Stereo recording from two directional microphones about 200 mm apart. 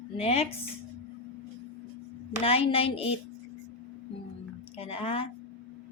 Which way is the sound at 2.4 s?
30° left (ahead or behind).